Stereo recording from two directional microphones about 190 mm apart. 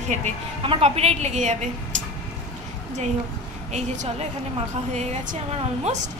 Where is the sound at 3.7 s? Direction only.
40° right (ahead or behind).